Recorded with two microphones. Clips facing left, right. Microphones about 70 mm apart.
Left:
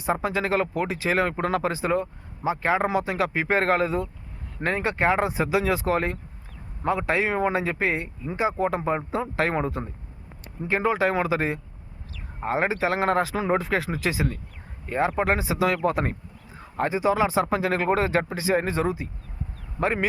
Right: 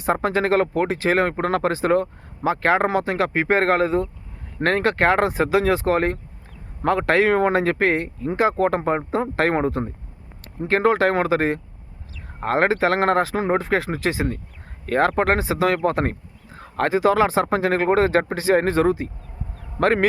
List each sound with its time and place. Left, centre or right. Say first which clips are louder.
0.0 s speech: right 5 dB; right
4.6 s speech: right 5 dB; right
6.8 s speech: right 6 dB; right
10.6 s speech: right 5 dB; right
12.4 s speech: right 5 dB; right
14.8 s speech: right 5 dB; right
16.6 s speech: right 5 dB; right
19.8 s speech: right 6 dB; right